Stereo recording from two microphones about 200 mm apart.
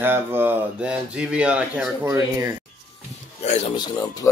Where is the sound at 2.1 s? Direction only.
15° right (ahead or behind).